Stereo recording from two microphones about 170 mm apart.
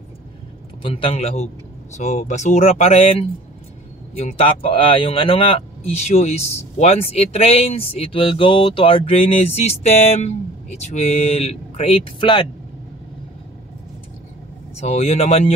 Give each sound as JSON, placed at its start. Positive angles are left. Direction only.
{"t": 0.8, "sound": "speech", "side_deg": 30}
{"t": 14.8, "sound": "speech", "side_deg": 40}